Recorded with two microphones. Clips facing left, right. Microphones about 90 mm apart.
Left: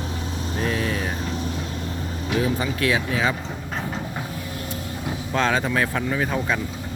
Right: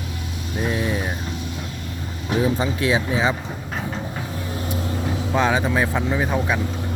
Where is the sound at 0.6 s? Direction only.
15° right (ahead or behind).